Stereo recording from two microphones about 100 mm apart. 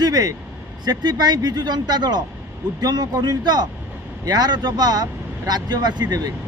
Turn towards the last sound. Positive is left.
turn(degrees=-45)  # may be behind; listen again after turning